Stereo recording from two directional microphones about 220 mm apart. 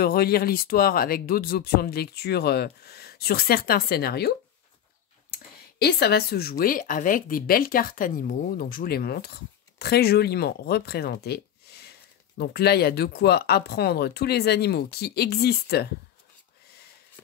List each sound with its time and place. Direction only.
0.0 s speech: 45° left (ahead or behind)
5.3 s a sound: 45° left (ahead or behind)
6.6 s speech: 40° left (ahead or behind)